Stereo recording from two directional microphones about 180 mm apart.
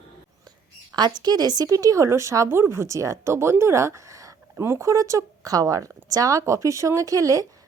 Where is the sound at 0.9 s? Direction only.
25° right (ahead or behind).